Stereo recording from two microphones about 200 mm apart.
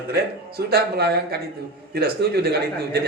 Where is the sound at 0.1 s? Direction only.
50° right (ahead or behind).